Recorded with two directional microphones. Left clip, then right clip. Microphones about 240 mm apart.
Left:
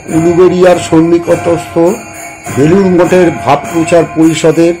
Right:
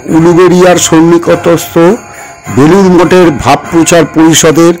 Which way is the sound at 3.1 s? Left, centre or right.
Right.